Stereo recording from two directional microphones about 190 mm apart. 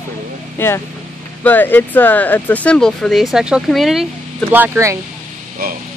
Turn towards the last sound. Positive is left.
turn(degrees=-50)  # may be behind; listen again after turning